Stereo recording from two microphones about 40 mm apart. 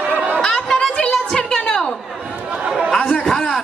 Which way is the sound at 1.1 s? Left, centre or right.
Centre.